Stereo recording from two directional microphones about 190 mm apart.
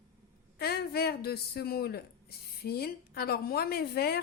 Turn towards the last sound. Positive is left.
turn(degrees=55)  # may be behind; listen again after turning